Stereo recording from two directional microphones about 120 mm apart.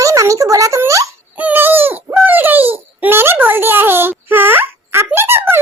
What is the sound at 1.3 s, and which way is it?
A child's voice, 15° right (ahead or behind).